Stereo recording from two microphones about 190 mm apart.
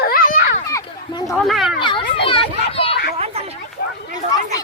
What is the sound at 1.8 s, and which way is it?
Children playing, 25° left (ahead or behind).